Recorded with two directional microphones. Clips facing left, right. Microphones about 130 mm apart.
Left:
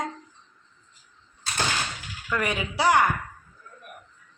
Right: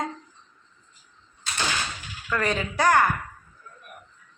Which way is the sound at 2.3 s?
15° left (ahead or behind).